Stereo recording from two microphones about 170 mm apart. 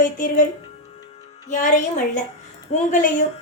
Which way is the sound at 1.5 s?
45° left (ahead or behind).